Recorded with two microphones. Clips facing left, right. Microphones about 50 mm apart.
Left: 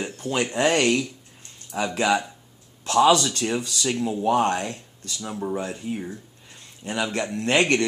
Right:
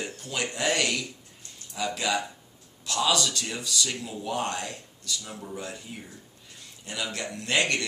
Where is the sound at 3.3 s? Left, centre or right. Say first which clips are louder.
Left 5 dB; left.